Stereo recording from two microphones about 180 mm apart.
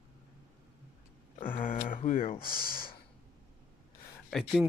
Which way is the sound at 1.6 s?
50° left (ahead or behind).